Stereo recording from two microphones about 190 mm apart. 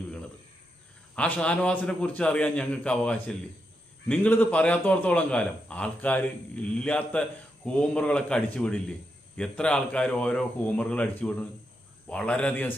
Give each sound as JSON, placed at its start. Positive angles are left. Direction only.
{"t": 1.1, "sound": "a man's voice", "side_deg": 5}